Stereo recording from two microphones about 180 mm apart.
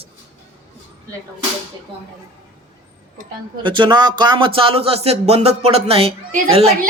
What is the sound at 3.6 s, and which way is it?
Speech, 25° right (ahead or behind).